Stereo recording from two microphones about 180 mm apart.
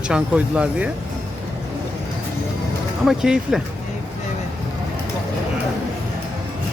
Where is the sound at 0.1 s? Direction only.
5° right (ahead or behind).